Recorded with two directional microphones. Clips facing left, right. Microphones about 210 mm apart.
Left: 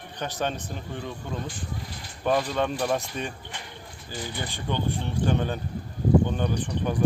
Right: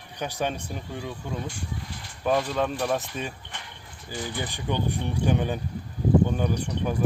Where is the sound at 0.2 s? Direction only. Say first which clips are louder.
Right 1 dB; 10° right (ahead or behind).